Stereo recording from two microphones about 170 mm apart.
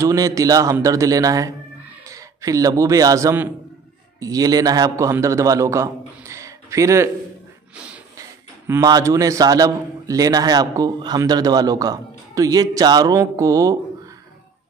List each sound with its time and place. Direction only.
0.0 s a man's voice: 20° right (ahead or behind)
7.7 s snort: 5° right (ahead or behind)
8.6 s a man's voice: 20° right (ahead or behind)